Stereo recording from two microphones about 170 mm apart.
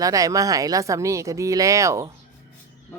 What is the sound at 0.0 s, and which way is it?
Speech, 20° right (ahead or behind).